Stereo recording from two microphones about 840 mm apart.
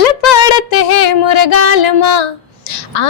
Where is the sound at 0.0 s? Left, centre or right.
Left.